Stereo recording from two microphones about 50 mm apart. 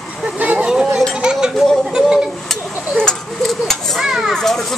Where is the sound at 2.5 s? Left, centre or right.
Centre.